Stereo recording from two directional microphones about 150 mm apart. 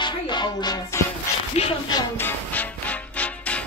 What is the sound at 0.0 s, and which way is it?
Music, 30° left (ahead or behind).